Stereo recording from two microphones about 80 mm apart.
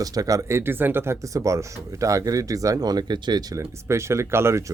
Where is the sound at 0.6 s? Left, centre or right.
Right.